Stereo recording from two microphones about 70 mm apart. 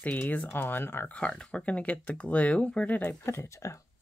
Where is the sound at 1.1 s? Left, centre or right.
Centre.